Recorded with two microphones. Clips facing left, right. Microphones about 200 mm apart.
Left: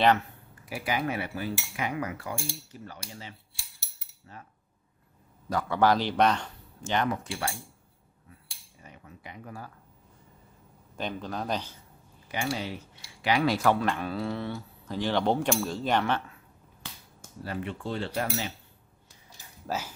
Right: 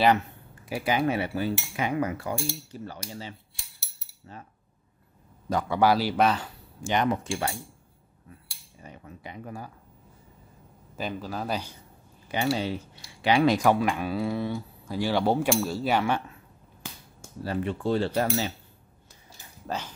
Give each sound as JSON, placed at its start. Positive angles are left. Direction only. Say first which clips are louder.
{"t": 0.7, "sound": "cutlery", "louder": "right 5 dB", "side_deg": -25}
{"t": 4.3, "sound": "cutlery", "louder": "right 3 dB", "side_deg": -25}
{"t": 5.5, "sound": "speech", "louder": "right 1 dB", "side_deg": -15}
{"t": 7.1, "sound": "cutlery", "louder": "right 4 dB", "side_deg": -25}
{"t": 8.8, "sound": "cutlery", "louder": "right 4 dB", "side_deg": -30}
{"t": 11.0, "sound": "speech", "louder": "right 1 dB", "side_deg": -5}
{"t": 12.3, "sound": "cutlery", "louder": "right 5 dB", "side_deg": -25}
{"t": 13.6, "sound": "speech", "louder": "right 2 dB", "side_deg": -15}
{"t": 17.4, "sound": "cutlery", "louder": "right 5 dB", "side_deg": -35}
{"t": 19.6, "sound": "speech", "louder": "even", "side_deg": 5}